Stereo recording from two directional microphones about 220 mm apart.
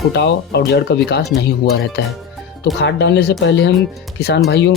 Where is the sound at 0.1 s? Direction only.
50° left (ahead or behind).